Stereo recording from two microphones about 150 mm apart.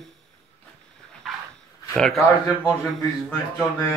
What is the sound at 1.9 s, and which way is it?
Speech, 5° left (ahead or behind).